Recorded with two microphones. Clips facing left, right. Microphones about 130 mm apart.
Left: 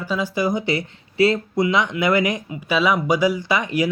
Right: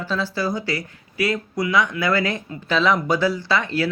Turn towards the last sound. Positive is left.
turn(degrees=15)  # may be behind; listen again after turning